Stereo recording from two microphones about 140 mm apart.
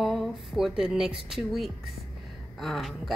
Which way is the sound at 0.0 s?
Centre (ahead or behind).